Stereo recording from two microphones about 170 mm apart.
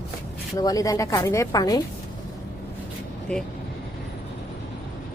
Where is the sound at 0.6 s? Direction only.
20° left (ahead or behind).